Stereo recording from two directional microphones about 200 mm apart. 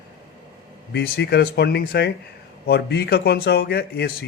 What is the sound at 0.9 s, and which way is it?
A man's voice, 55° left (ahead or behind).